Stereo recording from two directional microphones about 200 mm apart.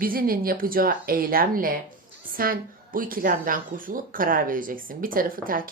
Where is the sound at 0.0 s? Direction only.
45° right (ahead or behind).